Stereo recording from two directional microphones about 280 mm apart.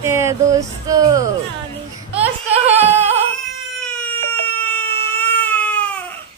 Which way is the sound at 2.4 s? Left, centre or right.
Right.